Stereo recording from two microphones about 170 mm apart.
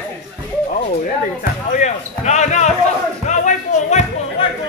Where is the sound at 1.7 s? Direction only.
45° left (ahead or behind).